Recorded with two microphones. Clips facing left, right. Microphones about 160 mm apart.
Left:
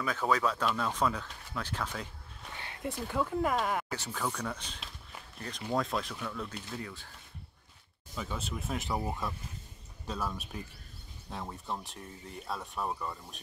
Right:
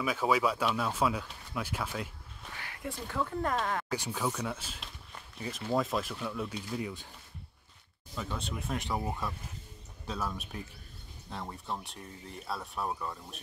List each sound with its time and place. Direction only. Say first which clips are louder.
0.0 s speech: right 1 dB; 10° right (ahead or behind)
2.6 s a sound: left 3 dB; 25° left (ahead or behind)
3.2 s speech: left 2 dB; 5° left (ahead or behind)
3.9 s speech: right 3 dB; 10° right (ahead or behind)
8.2 s speech: even; centre (ahead or behind)